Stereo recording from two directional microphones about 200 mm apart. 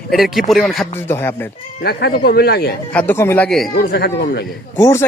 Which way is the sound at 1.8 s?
55° left (ahead or behind).